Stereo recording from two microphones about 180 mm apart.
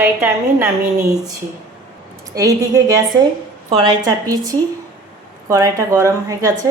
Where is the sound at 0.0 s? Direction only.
5° right (ahead or behind).